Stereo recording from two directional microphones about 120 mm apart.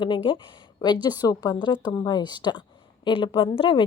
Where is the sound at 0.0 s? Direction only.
40° left (ahead or behind).